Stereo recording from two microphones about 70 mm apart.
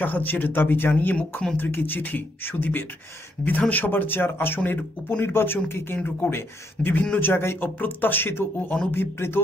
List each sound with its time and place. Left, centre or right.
0.0 s beatboxing: left
0.9 s beatboxing: centre
4.6 s speech: left
5.9 s beatboxing: left
7.2 s speech: left